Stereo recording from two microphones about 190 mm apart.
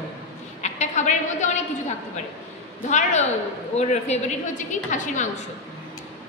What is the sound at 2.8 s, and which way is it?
A woman's voice, 40° left (ahead or behind).